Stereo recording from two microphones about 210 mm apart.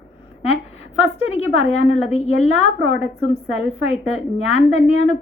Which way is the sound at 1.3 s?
30° left (ahead or behind).